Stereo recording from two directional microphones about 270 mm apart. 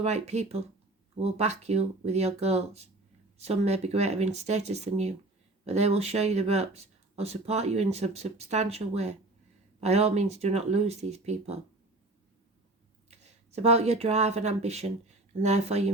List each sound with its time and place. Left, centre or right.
0.0 s speech: right
13.1 s speech: right